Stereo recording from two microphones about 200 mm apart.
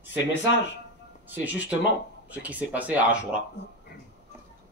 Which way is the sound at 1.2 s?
10° right (ahead or behind).